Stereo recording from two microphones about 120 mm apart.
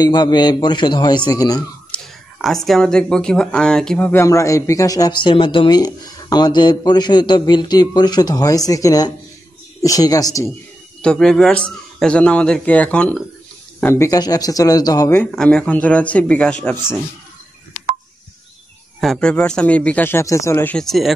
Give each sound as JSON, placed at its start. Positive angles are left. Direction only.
{"t": 0.0, "sound": "a man's voice", "side_deg": 35}
{"t": 1.9, "sound": "a sound", "side_deg": 5}
{"t": 2.4, "sound": "speech", "side_deg": 0}
{"t": 4.1, "sound": "a man's voice", "side_deg": 25}
{"t": 5.2, "sound": "a man's voice", "side_deg": 45}
{"t": 11.0, "sound": "a man's voice", "side_deg": 5}
{"t": 14.0, "sound": "a man's voice", "side_deg": 30}
{"t": 15.3, "sound": "a man's voice", "side_deg": 5}
{"t": 18.9, "sound": "a man's voice", "side_deg": 5}
{"t": 20.7, "sound": "speech", "side_deg": 0}